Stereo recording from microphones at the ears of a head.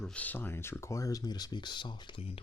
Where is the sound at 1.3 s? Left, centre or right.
Left.